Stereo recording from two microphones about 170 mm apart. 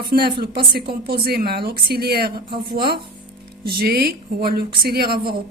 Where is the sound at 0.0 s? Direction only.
65° right (ahead or behind).